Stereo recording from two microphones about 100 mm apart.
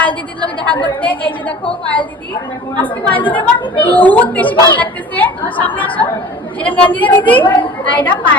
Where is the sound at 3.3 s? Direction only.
60° left (ahead or behind).